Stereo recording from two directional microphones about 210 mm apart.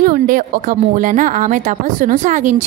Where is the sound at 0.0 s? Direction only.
40° right (ahead or behind).